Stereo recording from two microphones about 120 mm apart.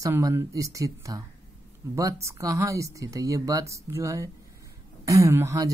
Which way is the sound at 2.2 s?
25° right (ahead or behind).